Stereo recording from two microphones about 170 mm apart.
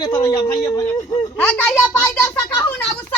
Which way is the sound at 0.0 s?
25° left (ahead or behind).